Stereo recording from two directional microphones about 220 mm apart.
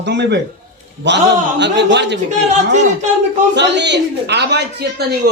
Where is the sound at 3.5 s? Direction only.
50° right (ahead or behind).